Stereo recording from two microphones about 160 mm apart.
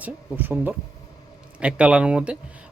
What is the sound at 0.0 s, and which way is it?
Speech, 10° right (ahead or behind).